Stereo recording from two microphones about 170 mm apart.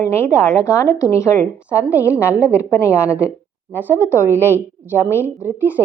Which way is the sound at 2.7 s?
15° left (ahead or behind).